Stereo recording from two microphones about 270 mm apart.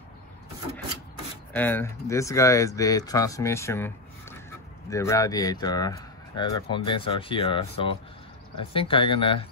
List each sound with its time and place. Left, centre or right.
1.5 s speech: centre